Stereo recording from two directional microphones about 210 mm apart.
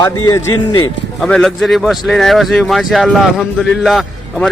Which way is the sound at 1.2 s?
5° left (ahead or behind).